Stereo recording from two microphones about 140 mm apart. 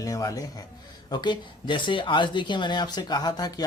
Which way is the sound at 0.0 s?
25° left (ahead or behind).